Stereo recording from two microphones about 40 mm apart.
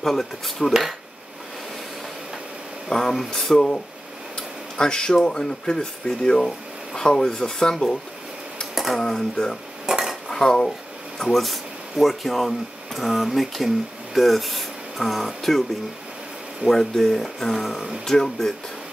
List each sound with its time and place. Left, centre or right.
0.0 s speech: centre
2.9 s speech: centre
8.7 s a sound: centre
9.0 s speech: centre
9.8 s cutlery: centre
10.2 s cutlery: centre
11.1 s speech: centre
16.6 s speech: centre